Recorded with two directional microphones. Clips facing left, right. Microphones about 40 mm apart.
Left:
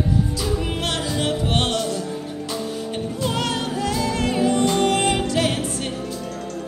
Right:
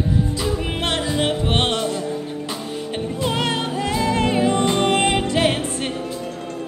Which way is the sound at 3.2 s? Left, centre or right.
Right.